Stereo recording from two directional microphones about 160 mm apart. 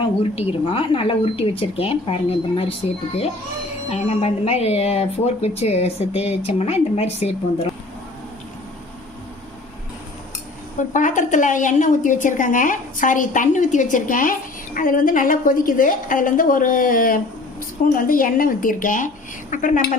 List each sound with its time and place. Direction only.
0.0 s speech: 35° left (ahead or behind)
3.8 s speech: 40° left (ahead or behind)
10.8 s a woman's voice: 50° left (ahead or behind)